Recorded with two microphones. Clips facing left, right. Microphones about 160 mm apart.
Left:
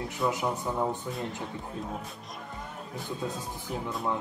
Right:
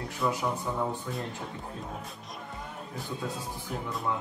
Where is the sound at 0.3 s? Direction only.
20° left (ahead or behind).